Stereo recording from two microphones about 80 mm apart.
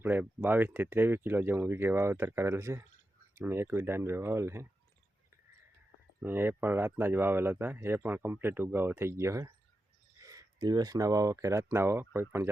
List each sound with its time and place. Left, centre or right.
0.0 s speech: right
6.1 s speech: right